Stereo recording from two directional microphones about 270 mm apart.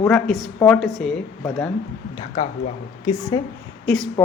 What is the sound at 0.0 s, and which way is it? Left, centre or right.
Speech, centre.